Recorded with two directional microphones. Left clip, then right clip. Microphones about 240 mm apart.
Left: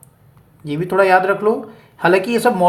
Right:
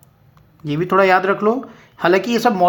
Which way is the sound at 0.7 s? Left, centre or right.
Right.